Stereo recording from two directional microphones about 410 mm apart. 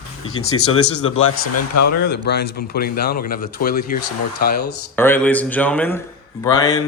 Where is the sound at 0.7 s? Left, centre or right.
Left.